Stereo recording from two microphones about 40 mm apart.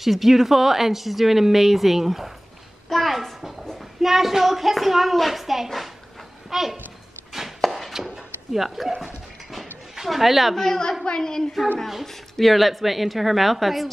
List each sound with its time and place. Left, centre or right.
0.0 s speech: centre
7.7 s chopping: centre
9.0 s dog: centre
9.9 s speech: centre
10.5 s a woman's voice: centre
12.0 s speech: centre